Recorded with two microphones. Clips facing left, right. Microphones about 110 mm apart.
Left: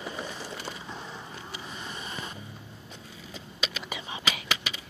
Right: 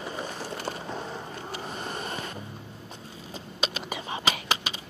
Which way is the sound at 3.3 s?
35° right (ahead or behind).